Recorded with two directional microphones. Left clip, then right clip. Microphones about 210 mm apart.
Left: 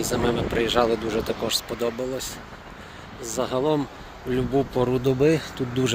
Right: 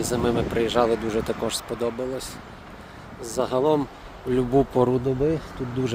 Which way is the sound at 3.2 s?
10° right (ahead or behind).